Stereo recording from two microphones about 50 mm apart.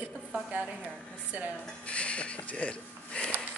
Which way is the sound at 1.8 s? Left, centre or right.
Left.